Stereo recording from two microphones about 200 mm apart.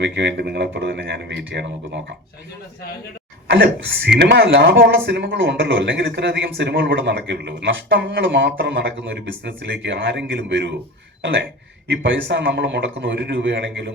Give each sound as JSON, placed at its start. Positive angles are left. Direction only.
{"t": 0.0, "sound": "speech", "side_deg": -60}
{"t": 3.4, "sound": "speech", "side_deg": -65}